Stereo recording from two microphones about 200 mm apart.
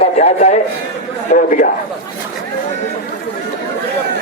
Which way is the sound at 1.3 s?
35° left (ahead or behind).